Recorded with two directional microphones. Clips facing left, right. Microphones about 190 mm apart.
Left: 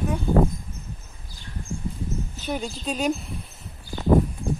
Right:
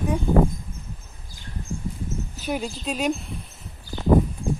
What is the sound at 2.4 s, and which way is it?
Speech, 5° right (ahead or behind).